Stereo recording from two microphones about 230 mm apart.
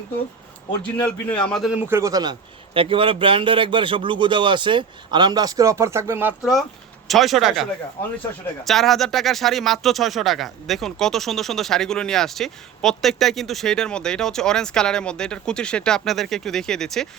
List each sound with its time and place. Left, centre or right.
0.8 s speech: centre